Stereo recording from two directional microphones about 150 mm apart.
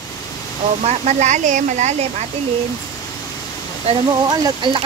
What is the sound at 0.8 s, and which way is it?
Speech, 50° right (ahead or behind).